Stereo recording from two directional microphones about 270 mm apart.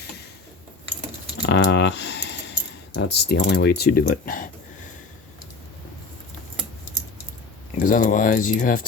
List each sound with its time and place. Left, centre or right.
1.4 s keys jangling: left
7.8 s speech: left